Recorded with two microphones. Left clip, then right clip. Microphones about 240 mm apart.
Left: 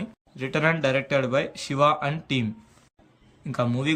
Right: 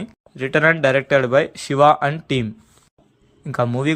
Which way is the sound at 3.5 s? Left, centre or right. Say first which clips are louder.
Right 6 dB; centre.